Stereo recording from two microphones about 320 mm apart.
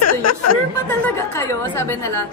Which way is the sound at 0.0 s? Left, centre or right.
Left.